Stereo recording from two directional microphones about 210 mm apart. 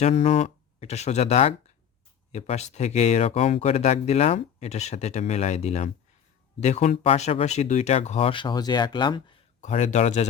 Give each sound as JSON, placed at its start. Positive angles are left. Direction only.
{"t": 0.0, "sound": "speech", "side_deg": 30}
{"t": 9.6, "sound": "speech", "side_deg": 35}